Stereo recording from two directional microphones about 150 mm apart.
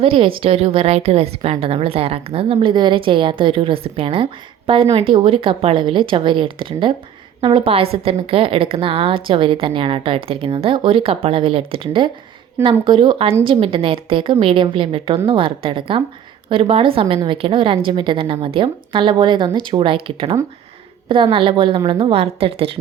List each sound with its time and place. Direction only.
0.0 s a woman's voice: 35° right (ahead or behind)